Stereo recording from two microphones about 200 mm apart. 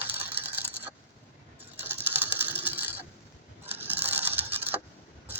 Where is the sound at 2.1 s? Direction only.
10° right (ahead or behind).